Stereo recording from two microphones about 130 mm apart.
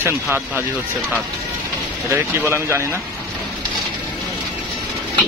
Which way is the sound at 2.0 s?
20° right (ahead or behind).